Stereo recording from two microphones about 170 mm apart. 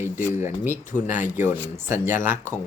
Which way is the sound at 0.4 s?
15° right (ahead or behind).